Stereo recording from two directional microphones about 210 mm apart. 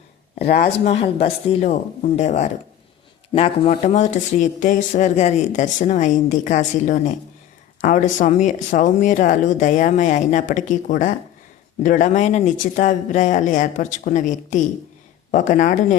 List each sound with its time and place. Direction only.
0.3 s speech: 50° left (ahead or behind)
0.9 s speech: 30° left (ahead or behind)